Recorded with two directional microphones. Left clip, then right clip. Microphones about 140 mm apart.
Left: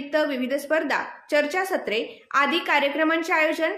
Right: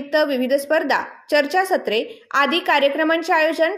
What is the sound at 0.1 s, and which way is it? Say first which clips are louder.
A woman's voice: right 6 dB; 40° right (ahead or behind).